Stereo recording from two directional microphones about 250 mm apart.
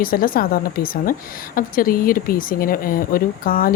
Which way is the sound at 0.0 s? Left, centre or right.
Left.